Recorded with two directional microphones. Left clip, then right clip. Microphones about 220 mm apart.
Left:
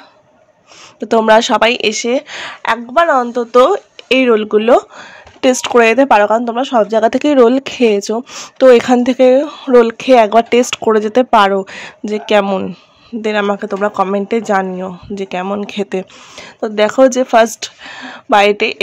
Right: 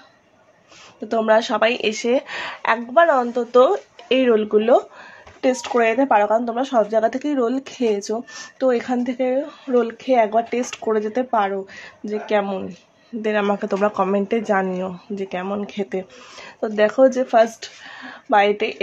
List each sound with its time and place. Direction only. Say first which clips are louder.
0.9 s speech: left 8 dB; 35° left (ahead or behind)
7.2 s speech: left 12 dB; 40° left (ahead or behind)
13.2 s speech: left 5 dB; 20° left (ahead or behind)